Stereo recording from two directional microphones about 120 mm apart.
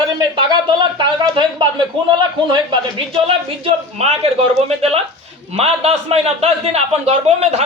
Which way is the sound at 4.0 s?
65° right (ahead or behind).